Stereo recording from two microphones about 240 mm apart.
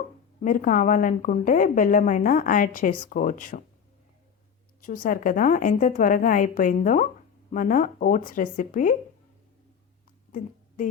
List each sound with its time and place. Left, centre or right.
0.4 s a woman's voice: left
4.8 s a woman's voice: left